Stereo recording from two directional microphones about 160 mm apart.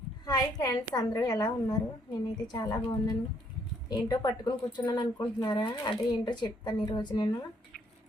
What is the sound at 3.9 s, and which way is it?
A woman's voice, 25° left (ahead or behind).